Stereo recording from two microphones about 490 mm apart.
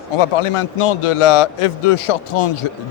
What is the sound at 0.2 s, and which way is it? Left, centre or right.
A man's voice, left.